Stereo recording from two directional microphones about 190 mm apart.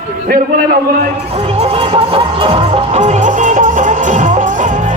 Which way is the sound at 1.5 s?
30° right (ahead or behind).